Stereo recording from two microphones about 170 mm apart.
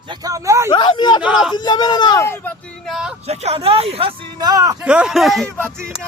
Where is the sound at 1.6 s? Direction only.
25° left (ahead or behind).